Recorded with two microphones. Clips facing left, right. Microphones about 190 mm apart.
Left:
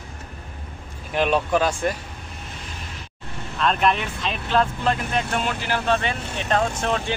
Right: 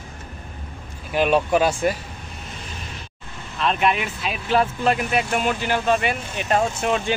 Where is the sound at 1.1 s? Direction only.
5° right (ahead or behind).